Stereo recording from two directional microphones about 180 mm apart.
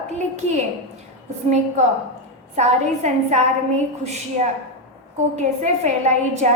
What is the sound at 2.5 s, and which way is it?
Speech, 40° right (ahead or behind).